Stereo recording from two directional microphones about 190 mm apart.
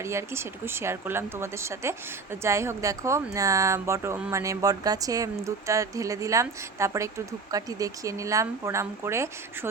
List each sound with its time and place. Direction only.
0.0 s a woman's voice: 15° right (ahead or behind)